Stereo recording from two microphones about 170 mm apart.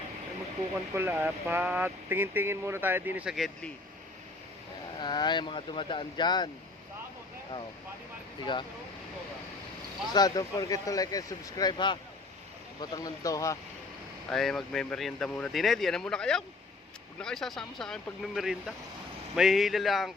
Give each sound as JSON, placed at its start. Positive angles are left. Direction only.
{"t": 0.9, "sound": "speech", "side_deg": -15}
{"t": 4.9, "sound": "speech", "side_deg": 25}
{"t": 10.1, "sound": "speech", "side_deg": 25}
{"t": 14.3, "sound": "speech", "side_deg": 0}